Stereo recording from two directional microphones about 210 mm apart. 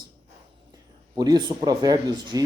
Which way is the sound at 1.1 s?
20° right (ahead or behind).